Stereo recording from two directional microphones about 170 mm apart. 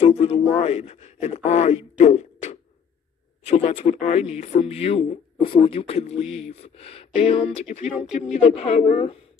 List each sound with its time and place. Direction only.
0.0 s a man's voice: 35° left (ahead or behind)